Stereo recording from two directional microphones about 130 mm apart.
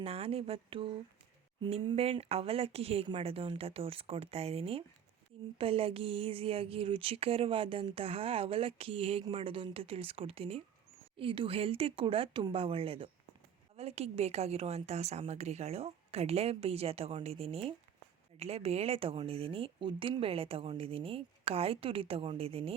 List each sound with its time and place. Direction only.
0.0 s speech: 50° right (ahead or behind)
2.0 s speech: 50° right (ahead or behind)